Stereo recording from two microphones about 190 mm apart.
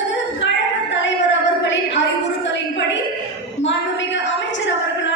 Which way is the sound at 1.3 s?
70° left (ahead or behind).